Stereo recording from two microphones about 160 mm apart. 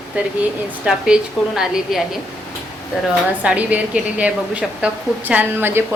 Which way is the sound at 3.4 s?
5° right (ahead or behind).